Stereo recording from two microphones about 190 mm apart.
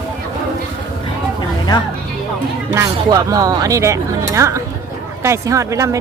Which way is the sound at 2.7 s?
15° right (ahead or behind).